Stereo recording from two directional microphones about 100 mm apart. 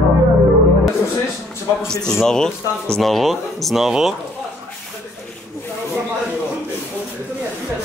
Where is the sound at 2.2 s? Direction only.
5° left (ahead or behind).